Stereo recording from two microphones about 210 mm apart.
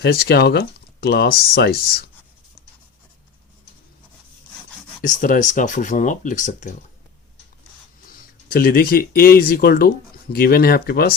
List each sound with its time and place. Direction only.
0.0 s speech: 50° left (ahead or behind)
5.0 s speech: 40° left (ahead or behind)
8.4 s speech: 45° left (ahead or behind)